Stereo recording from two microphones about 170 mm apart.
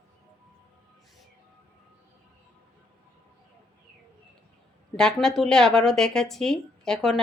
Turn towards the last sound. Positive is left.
turn(degrees=0)  # may be behind; listen again after turning